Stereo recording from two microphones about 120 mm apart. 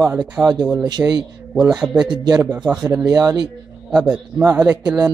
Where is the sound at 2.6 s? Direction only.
5° right (ahead or behind).